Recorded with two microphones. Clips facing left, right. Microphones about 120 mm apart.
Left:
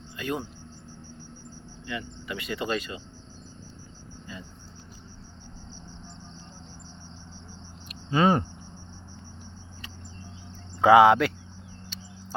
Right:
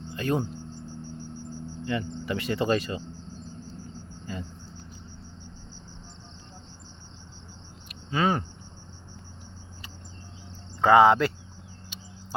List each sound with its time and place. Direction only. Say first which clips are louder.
0.2 s speech: right 4 dB; 35° right (ahead or behind)
1.8 s speech: right 6 dB; 35° right (ahead or behind)
8.1 s speech: left 3 dB; 25° left (ahead or behind)
10.8 s speech: left 1 dB; 5° left (ahead or behind)